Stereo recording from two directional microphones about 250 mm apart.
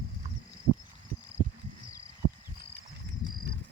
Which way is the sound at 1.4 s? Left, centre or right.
Left.